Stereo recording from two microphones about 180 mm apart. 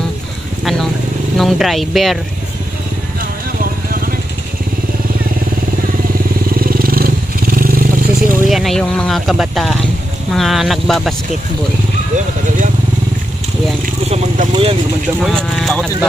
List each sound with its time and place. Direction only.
1.4 s speech: centre (ahead or behind)
6.6 s vehicle: 55° right (ahead or behind)
8.5 s speech: centre (ahead or behind)
14.0 s speech: 35° right (ahead or behind)
15.2 s speech: centre (ahead or behind)